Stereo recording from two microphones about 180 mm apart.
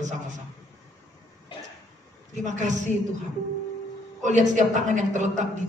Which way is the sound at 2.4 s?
40° right (ahead or behind).